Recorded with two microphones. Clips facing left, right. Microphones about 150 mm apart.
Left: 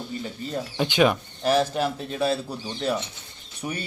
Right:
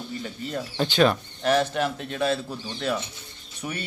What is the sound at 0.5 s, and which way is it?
Speech, 15° left (ahead or behind).